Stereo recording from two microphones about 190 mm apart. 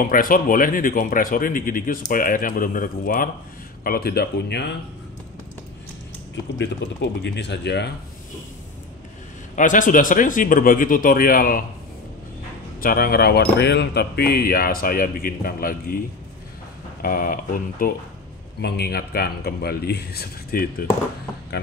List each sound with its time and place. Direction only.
0.0 s a man's voice: 50° left (ahead or behind)
6.6 s a man's voice: 65° left (ahead or behind)
9.6 s speech: 45° left (ahead or behind)
12.8 s speech: 50° left (ahead or behind)
17.0 s a man's voice: 50° left (ahead or behind)